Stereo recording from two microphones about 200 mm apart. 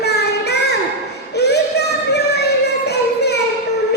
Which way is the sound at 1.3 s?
55° left (ahead or behind).